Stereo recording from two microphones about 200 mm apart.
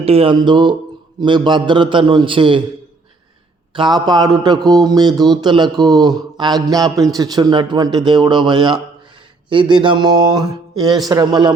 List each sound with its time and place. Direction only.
0.0 s a man's voice: 30° right (ahead or behind)
3.8 s a man's voice: 20° right (ahead or behind)